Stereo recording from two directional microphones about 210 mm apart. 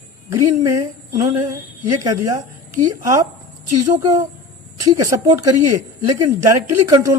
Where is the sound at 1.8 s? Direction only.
15° right (ahead or behind).